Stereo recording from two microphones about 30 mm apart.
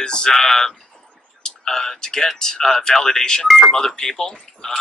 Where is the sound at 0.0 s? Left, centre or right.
Left.